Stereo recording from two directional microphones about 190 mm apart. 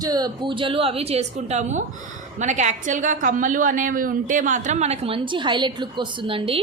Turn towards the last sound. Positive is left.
turn(degrees=-30)  # may be behind; listen again after turning